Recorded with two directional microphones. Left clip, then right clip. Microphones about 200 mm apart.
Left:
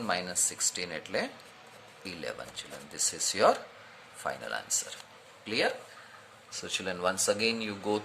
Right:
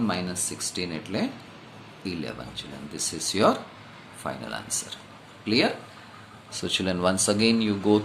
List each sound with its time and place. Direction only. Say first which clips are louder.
0.1 s speech: right 1 dB; 30° left (ahead or behind)